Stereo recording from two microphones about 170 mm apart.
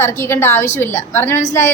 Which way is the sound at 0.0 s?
15° left (ahead or behind).